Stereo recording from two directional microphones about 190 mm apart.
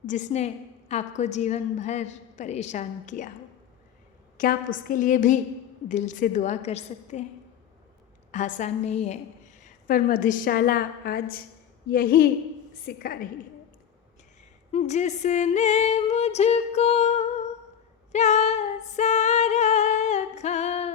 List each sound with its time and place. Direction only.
0.0 s a woman's voice: 40° left (ahead or behind)
4.4 s a woman's voice: 45° left (ahead or behind)
8.3 s a woman's voice: 40° left (ahead or behind)
14.7 s a woman's voice: 35° left (ahead or behind)
18.1 s female singing: 35° left (ahead or behind)